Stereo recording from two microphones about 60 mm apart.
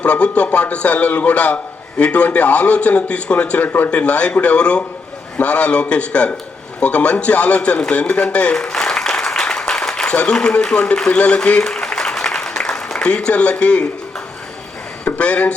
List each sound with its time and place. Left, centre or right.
0.0 s a man's voice: left
8.5 s applause: centre
10.2 s a man's voice: centre
11.7 s a sound: centre
15.0 s speech: left